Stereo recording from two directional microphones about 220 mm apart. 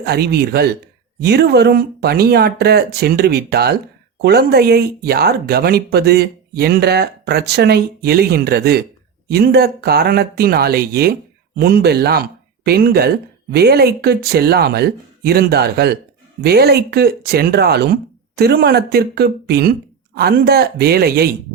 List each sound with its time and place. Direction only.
0.0 s speech: 45° right (ahead or behind)